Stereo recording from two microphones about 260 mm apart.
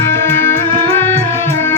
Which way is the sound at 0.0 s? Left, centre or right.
Centre.